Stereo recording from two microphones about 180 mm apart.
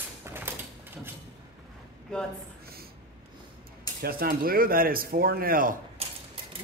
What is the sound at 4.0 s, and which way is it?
Speech, 55° right (ahead or behind).